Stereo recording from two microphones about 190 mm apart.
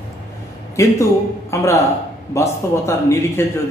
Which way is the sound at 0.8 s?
15° left (ahead or behind).